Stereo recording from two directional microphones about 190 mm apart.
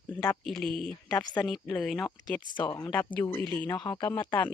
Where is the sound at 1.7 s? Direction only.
5° left (ahead or behind).